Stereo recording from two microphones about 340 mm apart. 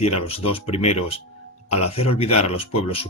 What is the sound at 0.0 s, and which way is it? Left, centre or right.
Speech, centre.